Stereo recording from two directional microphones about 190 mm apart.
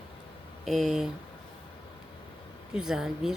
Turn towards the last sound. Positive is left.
turn(degrees=-5)  # may be behind; listen again after turning